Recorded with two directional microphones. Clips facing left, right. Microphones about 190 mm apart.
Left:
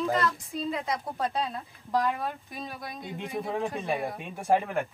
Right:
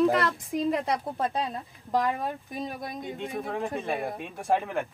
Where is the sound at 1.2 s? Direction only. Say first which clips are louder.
Left 2 dB; 20° right (ahead or behind).